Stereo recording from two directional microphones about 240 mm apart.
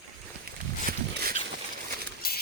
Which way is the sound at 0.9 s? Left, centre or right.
Right.